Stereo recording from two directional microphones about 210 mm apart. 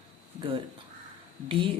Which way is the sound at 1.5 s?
25° right (ahead or behind).